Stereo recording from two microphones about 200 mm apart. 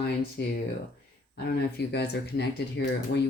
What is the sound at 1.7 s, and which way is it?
Speech, 55° left (ahead or behind).